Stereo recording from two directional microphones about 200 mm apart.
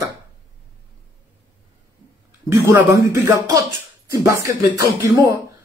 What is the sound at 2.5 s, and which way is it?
Speech, 15° right (ahead or behind).